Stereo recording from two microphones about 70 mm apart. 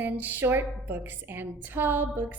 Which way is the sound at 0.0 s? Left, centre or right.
Right.